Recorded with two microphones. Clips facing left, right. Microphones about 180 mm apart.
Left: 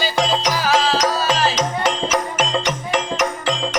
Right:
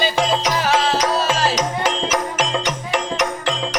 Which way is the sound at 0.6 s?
25° right (ahead or behind).